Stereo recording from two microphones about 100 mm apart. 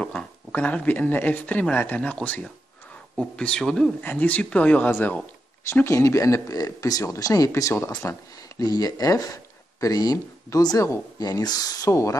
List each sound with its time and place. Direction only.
0.0 s speech: 10° left (ahead or behind)
4.0 s speech: 15° left (ahead or behind)
8.6 s speech: 40° left (ahead or behind)